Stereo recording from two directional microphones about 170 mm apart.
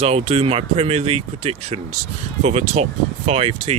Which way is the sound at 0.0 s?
35° right (ahead or behind).